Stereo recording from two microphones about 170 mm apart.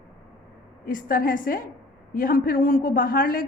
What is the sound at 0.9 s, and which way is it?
A man's voice, 60° left (ahead or behind).